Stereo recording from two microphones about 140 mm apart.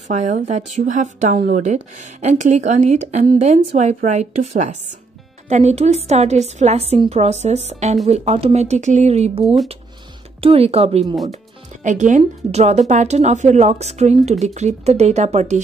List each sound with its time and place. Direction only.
0.1 s a woman's voice: 60° right (ahead or behind)
11.3 s music: 60° right (ahead or behind)
12.2 s a woman's voice: 50° right (ahead or behind)